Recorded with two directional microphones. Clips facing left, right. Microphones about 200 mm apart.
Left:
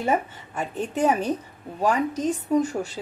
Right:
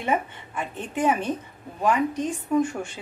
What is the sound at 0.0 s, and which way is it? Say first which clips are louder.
A woman's voice: left 2 dB; 40° left (ahead or behind).